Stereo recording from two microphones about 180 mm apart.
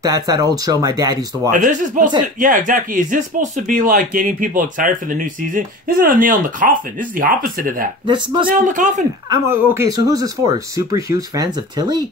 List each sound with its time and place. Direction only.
0.0 s speech: 20° right (ahead or behind)
1.5 s speech: 45° right (ahead or behind)
8.1 s speech: 25° right (ahead or behind)
8.5 s speech: 45° right (ahead or behind)
9.5 s speech: 15° right (ahead or behind)